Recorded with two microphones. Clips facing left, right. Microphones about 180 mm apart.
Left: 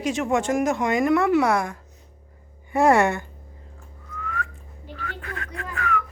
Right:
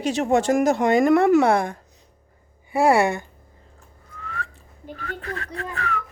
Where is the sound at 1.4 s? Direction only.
30° right (ahead or behind).